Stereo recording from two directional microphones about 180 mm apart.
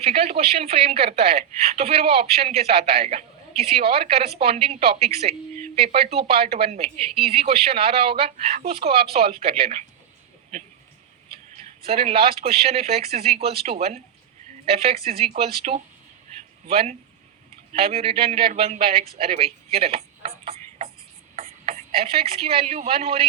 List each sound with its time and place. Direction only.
0.0 s a woman's voice: 35° right (ahead or behind)
11.5 s a woman's voice: 35° right (ahead or behind)